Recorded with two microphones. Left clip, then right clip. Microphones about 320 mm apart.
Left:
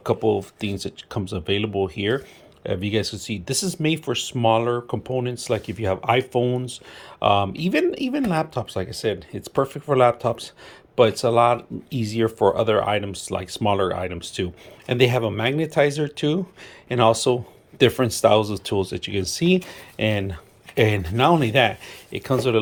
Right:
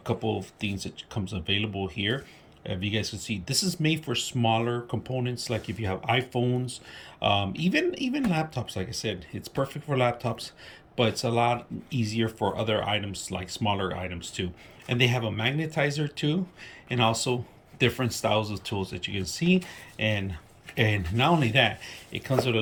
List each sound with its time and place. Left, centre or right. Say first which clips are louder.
0.0 s speech: left 9 dB; centre